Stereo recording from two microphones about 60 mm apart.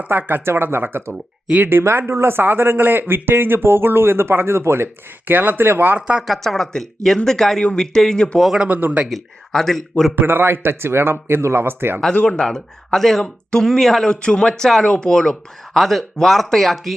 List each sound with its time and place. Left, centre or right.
0.1 s speech: right
5.3 s speech: right
6.0 s speech: centre
6.2 s speech: centre
8.5 s speech: right
9.0 s speech: centre
10.2 s speech: right
12.1 s speech: left
12.4 s speech: centre